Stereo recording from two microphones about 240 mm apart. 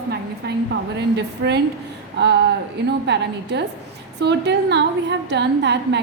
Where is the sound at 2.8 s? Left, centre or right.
Right.